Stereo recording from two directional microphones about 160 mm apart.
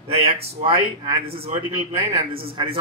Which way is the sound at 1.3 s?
35° right (ahead or behind).